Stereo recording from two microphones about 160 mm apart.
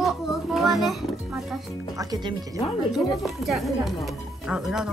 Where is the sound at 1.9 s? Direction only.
25° right (ahead or behind).